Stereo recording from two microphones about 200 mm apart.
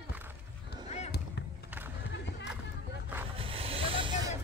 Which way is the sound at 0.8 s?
35° left (ahead or behind).